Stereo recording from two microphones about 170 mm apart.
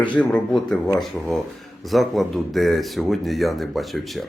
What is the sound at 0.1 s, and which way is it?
Speech, 10° left (ahead or behind).